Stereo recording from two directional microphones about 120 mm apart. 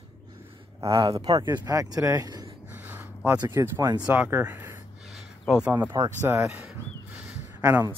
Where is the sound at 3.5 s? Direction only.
25° right (ahead or behind).